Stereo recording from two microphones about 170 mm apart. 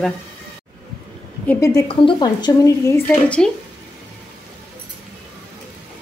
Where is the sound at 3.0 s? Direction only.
5° left (ahead or behind).